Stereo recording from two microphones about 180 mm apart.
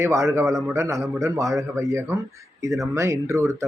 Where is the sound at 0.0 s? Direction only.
15° right (ahead or behind).